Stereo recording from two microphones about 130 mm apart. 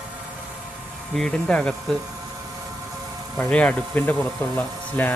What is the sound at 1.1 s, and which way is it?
Speech, 5° left (ahead or behind).